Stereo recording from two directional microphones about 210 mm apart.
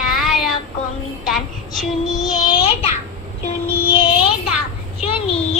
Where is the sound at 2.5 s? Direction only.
25° left (ahead or behind).